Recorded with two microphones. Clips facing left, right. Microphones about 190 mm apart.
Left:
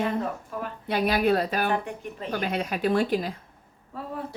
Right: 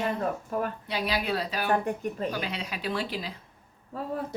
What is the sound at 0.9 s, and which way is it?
Speech, 50° left (ahead or behind).